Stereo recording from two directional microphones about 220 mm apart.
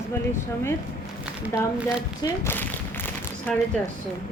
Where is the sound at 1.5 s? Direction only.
10° left (ahead or behind).